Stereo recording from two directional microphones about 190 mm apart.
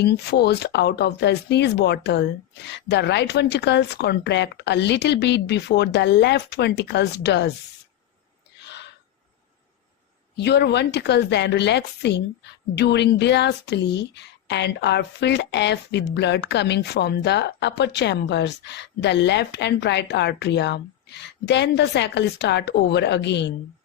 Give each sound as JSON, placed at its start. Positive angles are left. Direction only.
{"t": 0.0, "sound": "a woman's voice", "side_deg": 60}
{"t": 8.6, "sound": "gasp", "side_deg": 65}
{"t": 10.3, "sound": "a woman's voice", "side_deg": 60}